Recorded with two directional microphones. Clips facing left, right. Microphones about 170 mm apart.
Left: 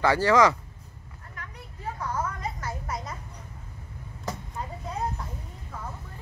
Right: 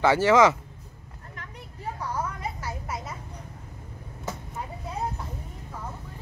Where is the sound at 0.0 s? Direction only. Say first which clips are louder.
Right 2 dB; 20° right (ahead or behind).